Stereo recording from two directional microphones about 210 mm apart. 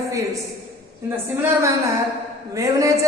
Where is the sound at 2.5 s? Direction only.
15° right (ahead or behind).